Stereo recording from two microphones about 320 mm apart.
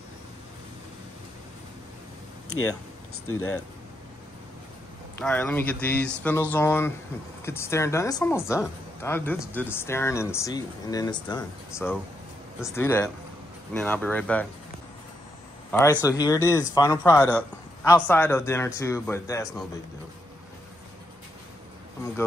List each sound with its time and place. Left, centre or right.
3.3 s speech: left
5.2 s speech: centre
15.7 s a man's voice: centre